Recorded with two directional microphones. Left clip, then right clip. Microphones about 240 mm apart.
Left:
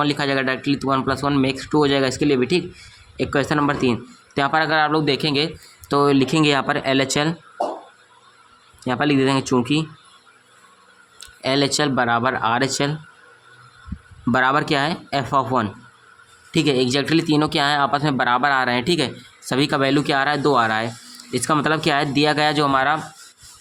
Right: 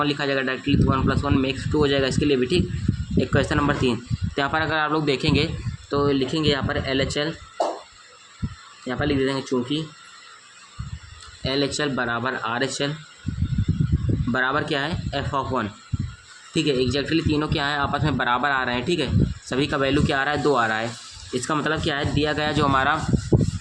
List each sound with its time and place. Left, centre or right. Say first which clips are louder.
0.0 s speech: left 3 dB; left
5.9 s speech: left 5 dB; left
8.8 s speech: left 5 dB; left
11.4 s speech: left 5 dB; left
14.3 s speech: left 5 dB; left